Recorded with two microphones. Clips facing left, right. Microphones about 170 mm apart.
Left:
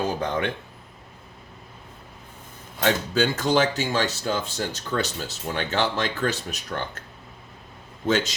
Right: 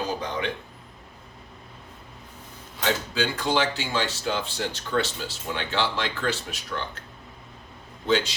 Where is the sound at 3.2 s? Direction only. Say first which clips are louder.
Left 4 dB; 45° left (ahead or behind).